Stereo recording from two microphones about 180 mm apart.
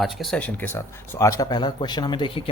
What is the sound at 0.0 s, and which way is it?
Speech, centre (ahead or behind).